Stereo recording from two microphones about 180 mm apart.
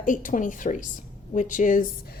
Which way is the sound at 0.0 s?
50° left (ahead or behind).